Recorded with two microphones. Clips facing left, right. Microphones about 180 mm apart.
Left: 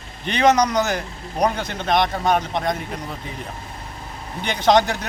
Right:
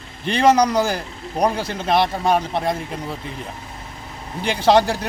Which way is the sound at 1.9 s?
30° right (ahead or behind).